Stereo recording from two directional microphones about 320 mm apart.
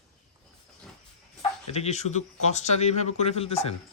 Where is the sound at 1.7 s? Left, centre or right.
Centre.